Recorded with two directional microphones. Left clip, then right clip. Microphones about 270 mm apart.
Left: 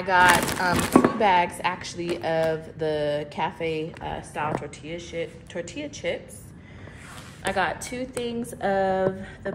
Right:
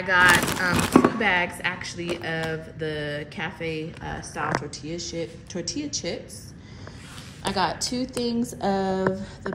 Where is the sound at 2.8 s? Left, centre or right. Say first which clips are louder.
Left 5 dB; left.